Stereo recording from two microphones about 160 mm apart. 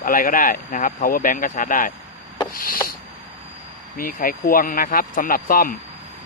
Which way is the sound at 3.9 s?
60° left (ahead or behind).